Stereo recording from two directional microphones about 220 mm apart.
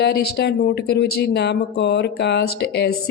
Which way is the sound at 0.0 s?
50° left (ahead or behind).